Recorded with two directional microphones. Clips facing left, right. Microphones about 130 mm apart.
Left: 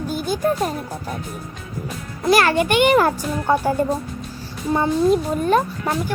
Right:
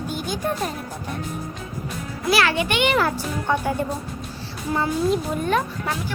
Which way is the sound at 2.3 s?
45° left (ahead or behind).